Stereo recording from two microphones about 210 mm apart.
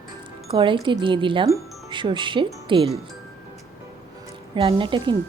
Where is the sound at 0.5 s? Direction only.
25° right (ahead or behind).